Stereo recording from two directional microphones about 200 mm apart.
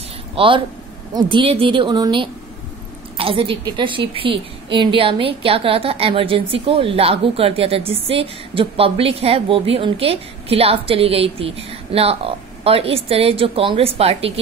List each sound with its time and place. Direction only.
0.4 s a woman's voice: 25° right (ahead or behind)